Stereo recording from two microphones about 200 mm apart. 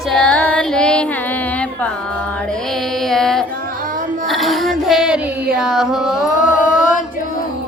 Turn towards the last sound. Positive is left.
turn(degrees=-5)  # may be behind; listen again after turning